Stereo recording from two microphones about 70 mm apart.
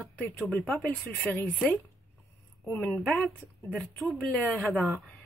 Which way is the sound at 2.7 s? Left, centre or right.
Left.